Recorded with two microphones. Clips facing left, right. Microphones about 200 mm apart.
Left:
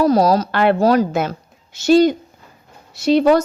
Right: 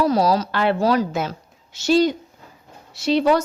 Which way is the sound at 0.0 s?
45° left (ahead or behind).